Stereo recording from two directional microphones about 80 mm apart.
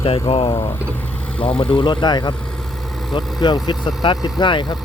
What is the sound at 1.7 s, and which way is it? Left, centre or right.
Speech, left.